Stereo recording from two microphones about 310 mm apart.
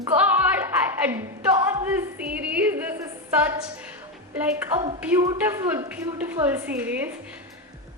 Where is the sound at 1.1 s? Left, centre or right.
Centre.